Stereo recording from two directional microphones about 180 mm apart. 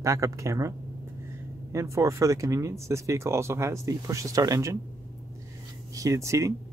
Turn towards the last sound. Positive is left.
turn(degrees=-15)  # may be behind; listen again after turning